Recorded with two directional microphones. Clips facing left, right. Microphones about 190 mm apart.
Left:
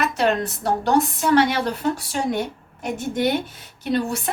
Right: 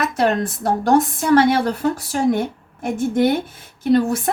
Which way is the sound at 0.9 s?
50° right (ahead or behind).